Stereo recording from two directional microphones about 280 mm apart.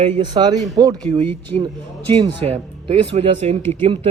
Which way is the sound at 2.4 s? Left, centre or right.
Right.